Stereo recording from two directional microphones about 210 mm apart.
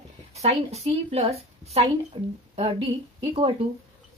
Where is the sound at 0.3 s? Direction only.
30° right (ahead or behind).